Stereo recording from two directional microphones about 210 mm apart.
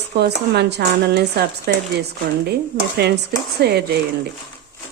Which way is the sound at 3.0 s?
50° right (ahead or behind).